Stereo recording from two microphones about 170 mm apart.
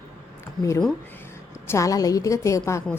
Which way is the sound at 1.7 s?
20° left (ahead or behind).